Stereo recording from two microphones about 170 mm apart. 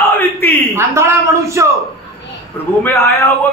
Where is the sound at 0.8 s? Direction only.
15° right (ahead or behind).